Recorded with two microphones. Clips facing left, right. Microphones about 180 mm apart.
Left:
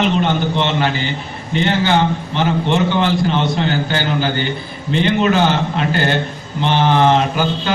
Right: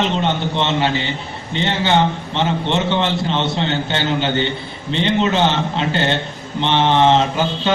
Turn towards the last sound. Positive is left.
turn(degrees=-25)  # may be behind; listen again after turning